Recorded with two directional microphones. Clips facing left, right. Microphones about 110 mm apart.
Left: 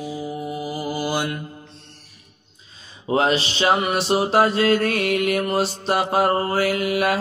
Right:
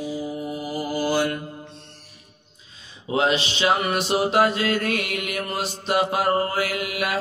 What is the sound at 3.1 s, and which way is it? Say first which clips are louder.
Mantra: left 2 dB; 40° left (ahead or behind).